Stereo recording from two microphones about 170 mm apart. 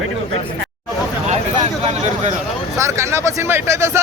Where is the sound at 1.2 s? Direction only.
40° right (ahead or behind).